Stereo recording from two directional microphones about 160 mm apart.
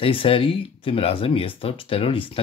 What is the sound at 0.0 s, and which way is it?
Speech, 35° left (ahead or behind).